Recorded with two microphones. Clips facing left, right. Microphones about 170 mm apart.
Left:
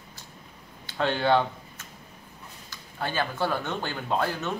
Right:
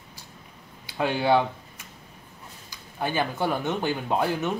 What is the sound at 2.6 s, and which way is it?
Speech, 15° right (ahead or behind).